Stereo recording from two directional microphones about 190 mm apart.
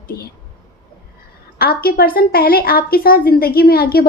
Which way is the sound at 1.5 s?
50° left (ahead or behind).